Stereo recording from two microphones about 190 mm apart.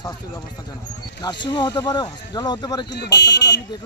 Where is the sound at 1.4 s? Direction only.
25° left (ahead or behind).